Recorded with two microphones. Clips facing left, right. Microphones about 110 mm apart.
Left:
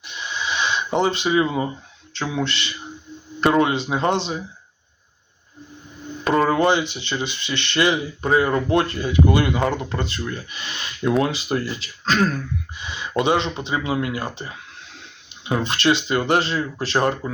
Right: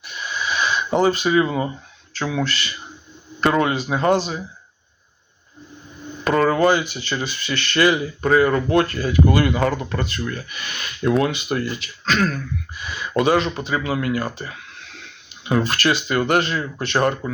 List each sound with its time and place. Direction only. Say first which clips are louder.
0.0 s wheeze: right 1 dB; 25° left (ahead or behind)
0.9 s speech: right 3 dB; 20° left (ahead or behind)
6.2 s speech: right 1 dB; 25° left (ahead or behind)
12.7 s speech: right 2 dB; 25° left (ahead or behind)